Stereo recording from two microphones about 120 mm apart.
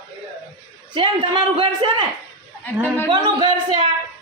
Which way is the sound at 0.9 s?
45° right (ahead or behind).